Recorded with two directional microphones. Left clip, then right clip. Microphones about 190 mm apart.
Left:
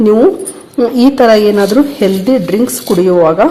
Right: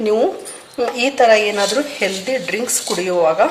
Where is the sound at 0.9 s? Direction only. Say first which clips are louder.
Left 5 dB; 25° left (ahead or behind).